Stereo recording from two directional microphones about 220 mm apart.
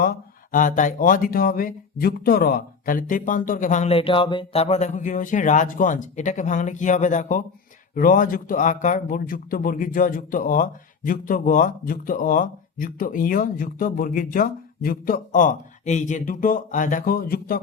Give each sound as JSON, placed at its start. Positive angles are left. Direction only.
{"t": 0.5, "sound": "speech", "side_deg": 35}